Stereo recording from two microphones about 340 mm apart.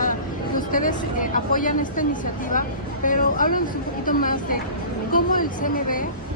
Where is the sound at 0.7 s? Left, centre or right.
Left.